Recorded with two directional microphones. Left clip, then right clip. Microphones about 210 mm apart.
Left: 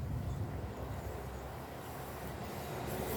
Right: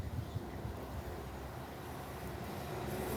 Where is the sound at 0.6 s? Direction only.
35° left (ahead or behind).